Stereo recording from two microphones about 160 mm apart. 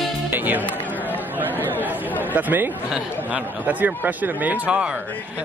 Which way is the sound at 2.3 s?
10° right (ahead or behind).